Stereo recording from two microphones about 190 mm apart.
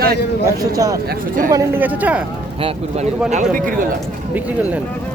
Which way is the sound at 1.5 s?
15° right (ahead or behind).